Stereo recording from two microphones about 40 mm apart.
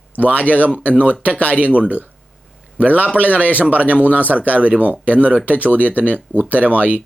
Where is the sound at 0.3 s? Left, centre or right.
Left.